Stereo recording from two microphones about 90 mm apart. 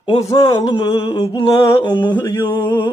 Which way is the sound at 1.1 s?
60° left (ahead or behind).